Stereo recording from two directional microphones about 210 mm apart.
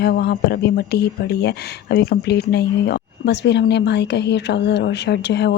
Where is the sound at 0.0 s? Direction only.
50° left (ahead or behind).